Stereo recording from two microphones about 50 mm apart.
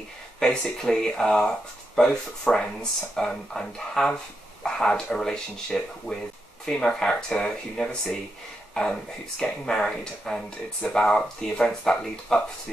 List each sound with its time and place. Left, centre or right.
0.4 s speech: centre